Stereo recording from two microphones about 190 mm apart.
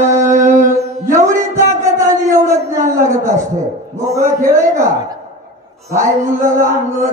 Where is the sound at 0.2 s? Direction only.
15° right (ahead or behind).